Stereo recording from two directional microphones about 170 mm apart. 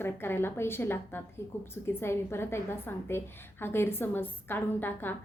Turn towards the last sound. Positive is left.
turn(degrees=10)  # may be behind; listen again after turning